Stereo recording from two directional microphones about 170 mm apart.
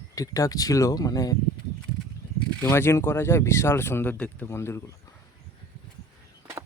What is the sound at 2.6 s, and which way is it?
Speech, 15° left (ahead or behind).